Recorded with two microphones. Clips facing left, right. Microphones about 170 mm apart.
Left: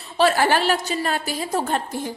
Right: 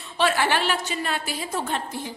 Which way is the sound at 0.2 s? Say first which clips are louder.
Left 4 dB; 40° left (ahead or behind).